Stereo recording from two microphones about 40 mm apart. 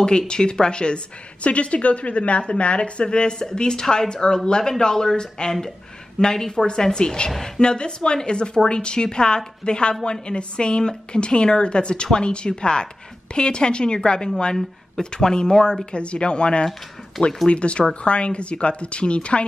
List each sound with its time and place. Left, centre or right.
0.3 s a woman's voice: left